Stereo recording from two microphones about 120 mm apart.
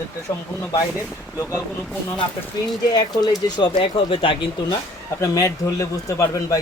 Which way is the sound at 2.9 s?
35° left (ahead or behind).